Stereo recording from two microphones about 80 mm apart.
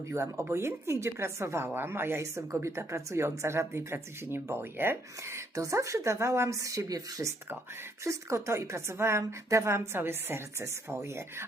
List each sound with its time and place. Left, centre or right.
0.1 s a woman's voice: right